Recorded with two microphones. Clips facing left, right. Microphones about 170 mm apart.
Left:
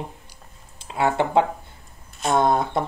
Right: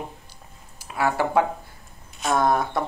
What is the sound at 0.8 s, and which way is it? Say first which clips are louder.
A child's voice: left 2 dB; 25° left (ahead or behind).